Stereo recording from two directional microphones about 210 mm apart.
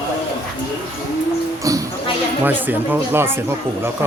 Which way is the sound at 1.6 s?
15° right (ahead or behind).